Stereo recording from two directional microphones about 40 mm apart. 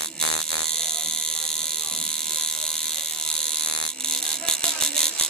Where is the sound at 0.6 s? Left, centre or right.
Centre.